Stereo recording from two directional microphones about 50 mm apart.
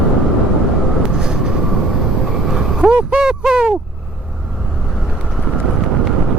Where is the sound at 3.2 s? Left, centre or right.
Centre.